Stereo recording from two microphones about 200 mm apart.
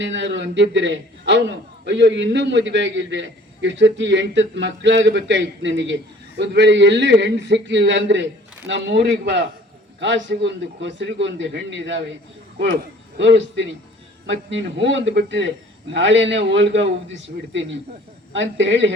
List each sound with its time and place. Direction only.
0.0 s a man's voice: 65° right (ahead or behind)
13.1 s a man's voice: 65° right (ahead or behind)